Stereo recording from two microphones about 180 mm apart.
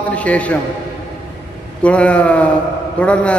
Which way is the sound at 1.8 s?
5° left (ahead or behind).